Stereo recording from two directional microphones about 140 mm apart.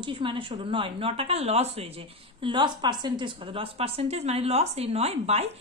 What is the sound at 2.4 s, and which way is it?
A woman's voice, 35° right (ahead or behind).